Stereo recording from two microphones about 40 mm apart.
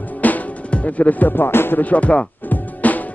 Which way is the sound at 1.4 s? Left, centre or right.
Left.